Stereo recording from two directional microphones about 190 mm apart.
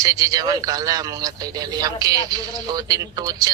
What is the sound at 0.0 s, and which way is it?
A man's voice, 20° right (ahead or behind).